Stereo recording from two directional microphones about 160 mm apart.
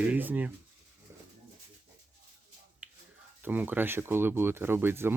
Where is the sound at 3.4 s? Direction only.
10° right (ahead or behind).